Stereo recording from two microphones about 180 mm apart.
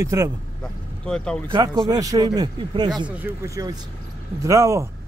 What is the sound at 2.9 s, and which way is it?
Speech, 10° right (ahead or behind).